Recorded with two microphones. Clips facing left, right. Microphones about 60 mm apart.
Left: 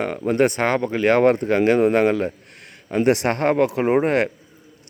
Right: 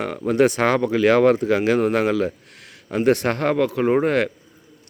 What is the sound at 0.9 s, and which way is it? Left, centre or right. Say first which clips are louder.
Speech: even; left.